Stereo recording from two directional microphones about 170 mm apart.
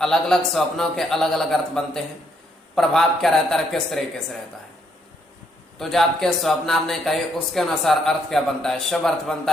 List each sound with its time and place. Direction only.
0.0 s speech: centre (ahead or behind)
5.8 s speech: centre (ahead or behind)